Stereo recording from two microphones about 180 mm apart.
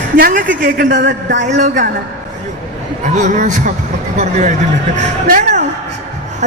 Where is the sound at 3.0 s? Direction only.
45° right (ahead or behind).